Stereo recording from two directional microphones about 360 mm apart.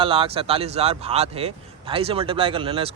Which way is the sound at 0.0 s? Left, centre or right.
Centre.